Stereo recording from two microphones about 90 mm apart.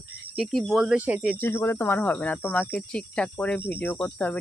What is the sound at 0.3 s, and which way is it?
Speech, centre (ahead or behind).